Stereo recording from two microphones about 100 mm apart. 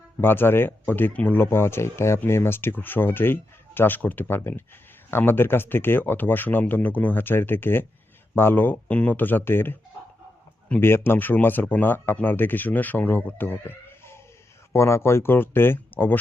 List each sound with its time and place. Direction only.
0.2 s speech: 20° left (ahead or behind)